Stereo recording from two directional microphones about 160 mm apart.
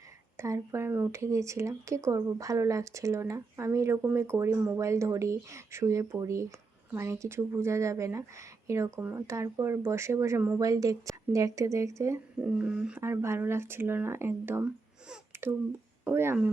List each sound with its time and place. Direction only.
0.3 s speech: 20° right (ahead or behind)
15.1 s a sound: 15° right (ahead or behind)
16.0 s speech: 15° right (ahead or behind)